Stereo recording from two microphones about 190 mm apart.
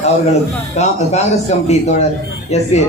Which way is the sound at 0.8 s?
35° left (ahead or behind).